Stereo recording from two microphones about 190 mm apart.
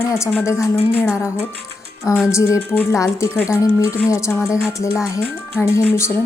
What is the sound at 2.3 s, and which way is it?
Speech, 15° left (ahead or behind).